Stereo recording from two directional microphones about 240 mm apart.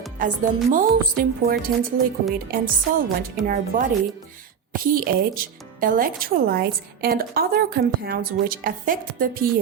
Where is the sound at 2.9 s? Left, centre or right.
Right.